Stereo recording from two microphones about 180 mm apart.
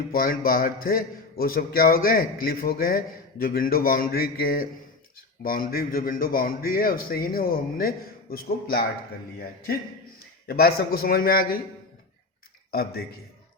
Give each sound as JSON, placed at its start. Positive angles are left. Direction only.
{"t": 0.1, "sound": "a man's voice", "side_deg": 50}
{"t": 10.4, "sound": "a man's voice", "side_deg": 60}
{"t": 12.7, "sound": "a man's voice", "side_deg": 60}